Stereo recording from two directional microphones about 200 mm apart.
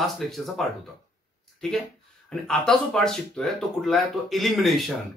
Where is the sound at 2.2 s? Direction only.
5° left (ahead or behind).